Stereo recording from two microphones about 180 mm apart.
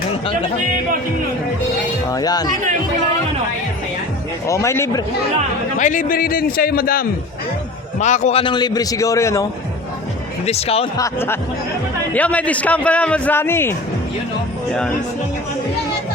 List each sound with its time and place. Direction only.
2.1 s a man's voice: 20° left (ahead or behind)
4.4 s a man's voice: 15° left (ahead or behind)
5.7 s a man's voice: 45° left (ahead or behind)
7.9 s a man's voice: 40° left (ahead or behind); by 9.5 s 15° left (ahead or behind)
10.4 s speech: 35° left (ahead or behind)
10.9 s a man's voice: 15° left (ahead or behind)